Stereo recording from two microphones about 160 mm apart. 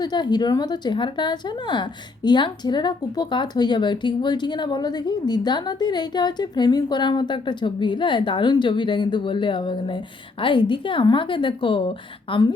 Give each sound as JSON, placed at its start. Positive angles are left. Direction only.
{"t": 0.0, "sound": "a woman's voice", "side_deg": 25}